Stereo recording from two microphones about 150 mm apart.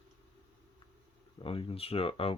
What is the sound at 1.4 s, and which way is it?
Speech, 35° left (ahead or behind).